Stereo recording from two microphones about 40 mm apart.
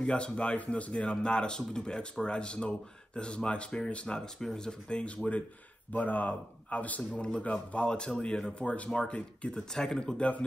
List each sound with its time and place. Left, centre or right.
0.0 s a man's voice: left
9.8 s speech: centre